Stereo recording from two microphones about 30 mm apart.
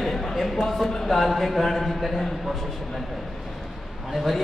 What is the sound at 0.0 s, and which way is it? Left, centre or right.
A man's voice, centre.